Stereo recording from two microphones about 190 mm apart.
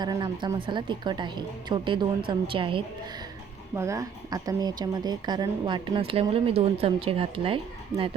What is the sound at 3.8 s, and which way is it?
A woman's voice, 15° right (ahead or behind).